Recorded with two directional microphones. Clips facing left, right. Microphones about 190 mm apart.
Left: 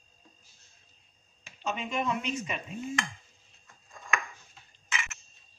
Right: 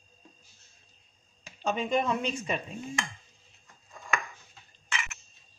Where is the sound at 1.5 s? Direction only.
35° right (ahead or behind).